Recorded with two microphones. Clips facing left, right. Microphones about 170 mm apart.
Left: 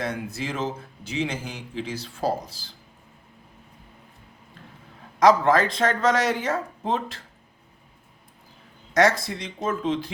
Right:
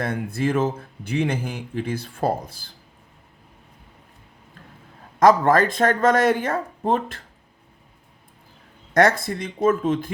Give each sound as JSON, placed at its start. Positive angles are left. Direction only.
{"t": 0.0, "sound": "speech", "side_deg": -55}
{"t": 5.2, "sound": "speech", "side_deg": -50}
{"t": 8.9, "sound": "speech", "side_deg": -55}